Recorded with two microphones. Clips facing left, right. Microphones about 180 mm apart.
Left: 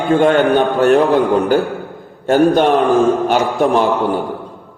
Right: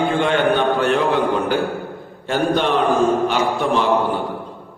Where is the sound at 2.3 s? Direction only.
45° left (ahead or behind).